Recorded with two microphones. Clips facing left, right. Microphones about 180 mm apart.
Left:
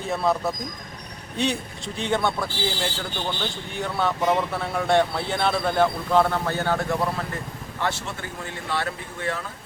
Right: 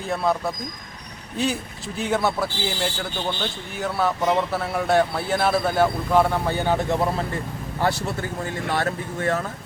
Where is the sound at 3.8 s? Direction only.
Centre (ahead or behind).